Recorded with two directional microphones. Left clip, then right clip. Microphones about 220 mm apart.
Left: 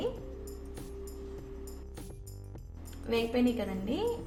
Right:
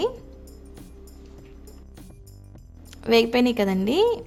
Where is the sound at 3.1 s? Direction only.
50° right (ahead or behind).